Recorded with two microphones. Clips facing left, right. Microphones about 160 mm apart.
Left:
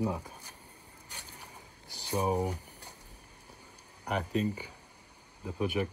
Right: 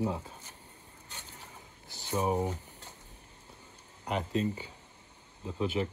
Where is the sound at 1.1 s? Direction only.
15° left (ahead or behind).